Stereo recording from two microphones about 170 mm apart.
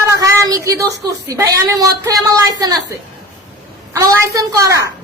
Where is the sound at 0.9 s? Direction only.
80° right.